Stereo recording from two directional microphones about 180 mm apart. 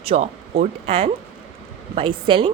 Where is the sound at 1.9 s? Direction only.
30° right (ahead or behind).